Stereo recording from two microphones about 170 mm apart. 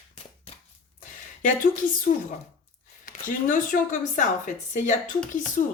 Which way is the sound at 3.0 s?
50° left (ahead or behind).